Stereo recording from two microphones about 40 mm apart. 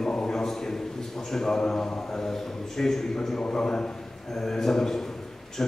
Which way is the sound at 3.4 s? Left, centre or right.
Left.